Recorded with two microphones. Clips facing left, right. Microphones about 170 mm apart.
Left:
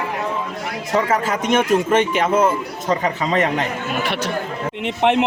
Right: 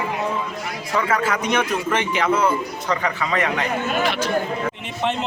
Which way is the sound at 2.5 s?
20° left (ahead or behind).